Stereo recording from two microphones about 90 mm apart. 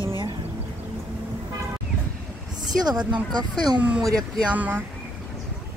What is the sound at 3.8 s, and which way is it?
Speech, 15° right (ahead or behind).